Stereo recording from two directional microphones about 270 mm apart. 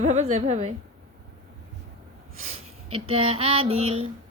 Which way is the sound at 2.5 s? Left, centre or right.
Right.